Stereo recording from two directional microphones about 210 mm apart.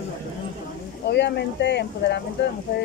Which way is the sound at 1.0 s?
55° left (ahead or behind).